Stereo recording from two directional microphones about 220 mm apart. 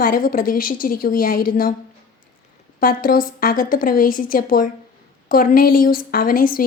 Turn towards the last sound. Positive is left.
turn(degrees=40)  # may be behind; listen again after turning